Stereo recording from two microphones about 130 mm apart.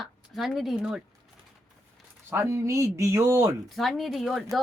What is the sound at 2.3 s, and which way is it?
Speech, 20° right (ahead or behind).